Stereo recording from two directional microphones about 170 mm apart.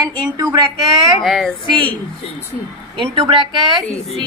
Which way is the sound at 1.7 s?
30° right (ahead or behind).